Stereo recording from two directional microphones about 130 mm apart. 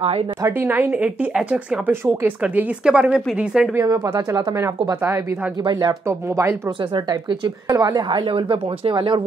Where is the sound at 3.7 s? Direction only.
25° right (ahead or behind).